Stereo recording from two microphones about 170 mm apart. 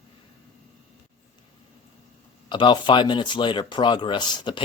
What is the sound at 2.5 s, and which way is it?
Speech, 25° left (ahead or behind).